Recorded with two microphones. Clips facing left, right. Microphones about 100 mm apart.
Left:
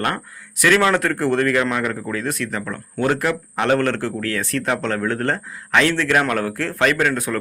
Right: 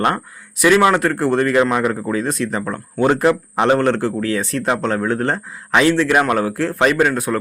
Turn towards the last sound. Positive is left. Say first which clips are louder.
# right 3 dB
turn(degrees=-15)  # may be behind; listen again after turning